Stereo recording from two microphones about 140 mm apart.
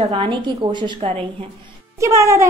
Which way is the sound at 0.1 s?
35° right (ahead or behind).